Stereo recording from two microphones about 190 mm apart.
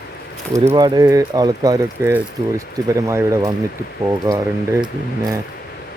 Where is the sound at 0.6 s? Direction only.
20° right (ahead or behind).